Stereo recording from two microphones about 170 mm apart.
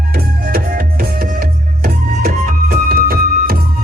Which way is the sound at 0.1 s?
55° right (ahead or behind).